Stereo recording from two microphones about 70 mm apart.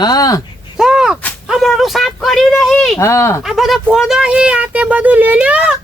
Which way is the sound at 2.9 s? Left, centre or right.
Left.